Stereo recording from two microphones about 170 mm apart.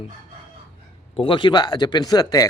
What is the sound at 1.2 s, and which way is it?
A man's voice, 30° left (ahead or behind).